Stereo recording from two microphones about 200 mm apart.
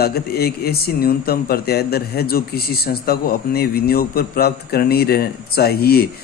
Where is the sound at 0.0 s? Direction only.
50° left (ahead or behind).